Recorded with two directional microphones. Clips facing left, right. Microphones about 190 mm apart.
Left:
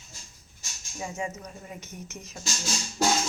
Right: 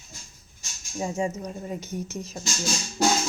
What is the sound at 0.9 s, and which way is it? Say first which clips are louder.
Speech: right 6 dB; 30° right (ahead or behind).